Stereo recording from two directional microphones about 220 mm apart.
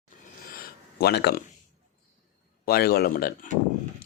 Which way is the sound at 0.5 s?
45° left (ahead or behind).